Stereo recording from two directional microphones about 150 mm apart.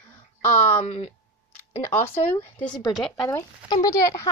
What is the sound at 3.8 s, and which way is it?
Speech, 25° left (ahead or behind).